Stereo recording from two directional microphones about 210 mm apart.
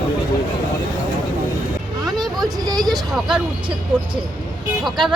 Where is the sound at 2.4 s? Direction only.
20° right (ahead or behind).